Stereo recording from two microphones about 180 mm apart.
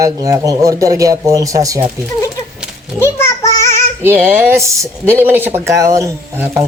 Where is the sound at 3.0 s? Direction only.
15° left (ahead or behind).